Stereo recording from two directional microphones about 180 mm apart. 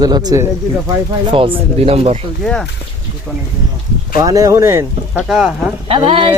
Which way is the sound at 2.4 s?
Centre (ahead or behind).